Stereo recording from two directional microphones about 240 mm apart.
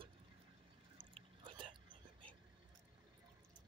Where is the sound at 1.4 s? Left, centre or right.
Centre.